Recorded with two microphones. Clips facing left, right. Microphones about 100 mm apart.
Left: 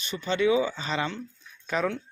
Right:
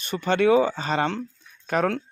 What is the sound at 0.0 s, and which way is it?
Speech, 55° right (ahead or behind).